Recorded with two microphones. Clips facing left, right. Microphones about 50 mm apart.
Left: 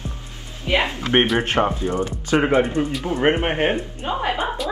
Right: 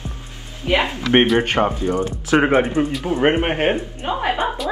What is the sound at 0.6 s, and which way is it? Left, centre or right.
Speech, right.